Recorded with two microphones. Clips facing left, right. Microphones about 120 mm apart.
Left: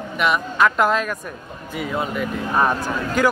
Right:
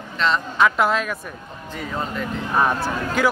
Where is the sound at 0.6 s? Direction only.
Centre (ahead or behind).